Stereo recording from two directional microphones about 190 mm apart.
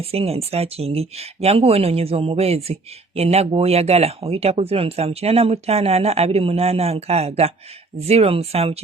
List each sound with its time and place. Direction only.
0.0 s speech: 30° right (ahead or behind)